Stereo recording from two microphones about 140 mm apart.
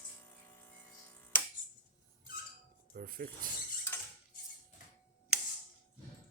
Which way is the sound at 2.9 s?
90° right.